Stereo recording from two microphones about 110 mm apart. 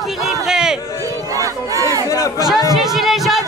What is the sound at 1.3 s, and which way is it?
Crowd, 30° right (ahead or behind).